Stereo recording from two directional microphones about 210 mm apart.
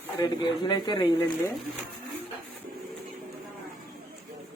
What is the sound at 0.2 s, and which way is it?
A man's voice, 20° left (ahead or behind).